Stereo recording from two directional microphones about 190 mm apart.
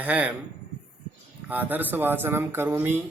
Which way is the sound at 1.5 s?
10° right (ahead or behind).